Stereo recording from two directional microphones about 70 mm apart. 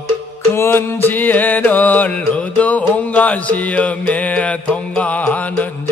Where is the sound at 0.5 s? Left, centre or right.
Left.